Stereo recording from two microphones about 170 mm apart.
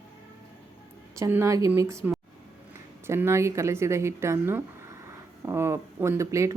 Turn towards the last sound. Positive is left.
turn(degrees=-20)  # may be behind; listen again after turning